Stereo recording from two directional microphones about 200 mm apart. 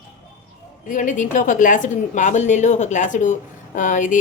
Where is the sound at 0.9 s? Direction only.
40° left (ahead or behind).